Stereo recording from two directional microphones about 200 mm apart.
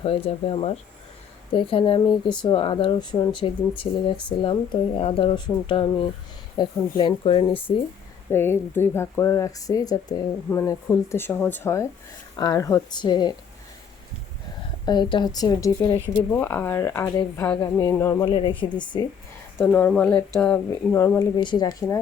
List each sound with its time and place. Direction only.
0.3 s speech: 30° left (ahead or behind)
8.3 s speech: 10° left (ahead or behind)
14.8 s speech: 20° left (ahead or behind)
16.3 s speech: 10° left (ahead or behind)
18.3 s speech: 25° left (ahead or behind)
19.5 s speech: 10° left (ahead or behind)